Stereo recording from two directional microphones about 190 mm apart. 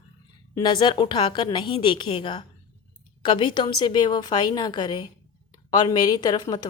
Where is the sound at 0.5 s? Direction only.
25° left (ahead or behind).